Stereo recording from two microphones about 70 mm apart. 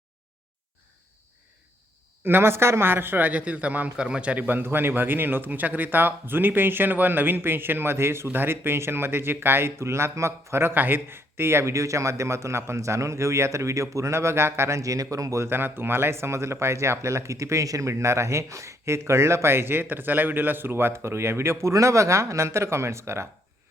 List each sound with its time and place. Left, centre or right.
2.2 s a man's voice: right
15.4 s a man's voice: right